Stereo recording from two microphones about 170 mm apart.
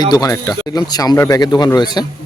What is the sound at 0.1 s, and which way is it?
Speech, 20° left (ahead or behind).